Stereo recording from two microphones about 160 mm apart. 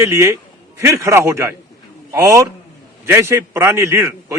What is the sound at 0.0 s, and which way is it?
A man's voice, 15° right (ahead or behind).